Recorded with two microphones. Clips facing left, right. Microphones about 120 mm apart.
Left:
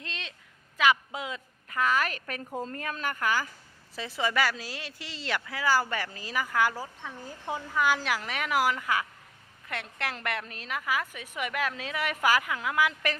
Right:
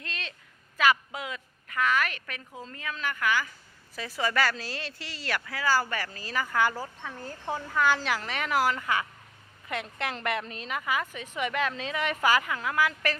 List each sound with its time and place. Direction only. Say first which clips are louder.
0.8 s a woman's voice: even; 20° left (ahead or behind); by 3.5 s 35° left (ahead or behind)
3.9 s a woman's voice: even; 25° left (ahead or behind)